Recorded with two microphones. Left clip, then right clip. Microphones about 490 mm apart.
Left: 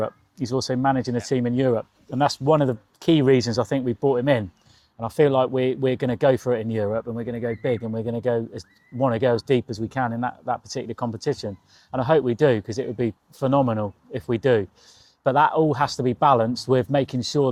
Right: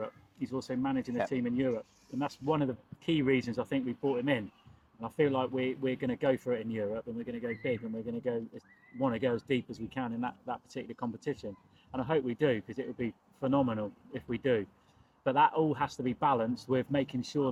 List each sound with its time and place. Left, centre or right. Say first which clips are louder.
0.0 s speech: left 12 dB; left